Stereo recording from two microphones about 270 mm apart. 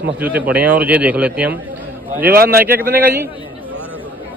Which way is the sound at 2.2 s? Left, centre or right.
Right.